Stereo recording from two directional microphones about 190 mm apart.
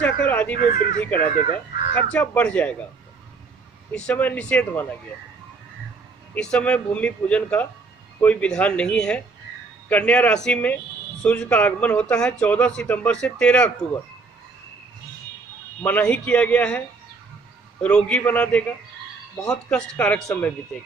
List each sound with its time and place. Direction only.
0.0 s speech: 10° left (ahead or behind)
0.6 s speech: 45° left (ahead or behind)
2.1 s speech: 5° left (ahead or behind)
3.9 s speech: 5° left (ahead or behind)
6.3 s speech: 5° left (ahead or behind)
15.8 s speech: 10° left (ahead or behind)
17.8 s speech: 5° left (ahead or behind)